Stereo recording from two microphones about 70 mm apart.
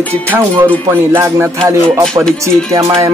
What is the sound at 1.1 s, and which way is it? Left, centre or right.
Speech, right.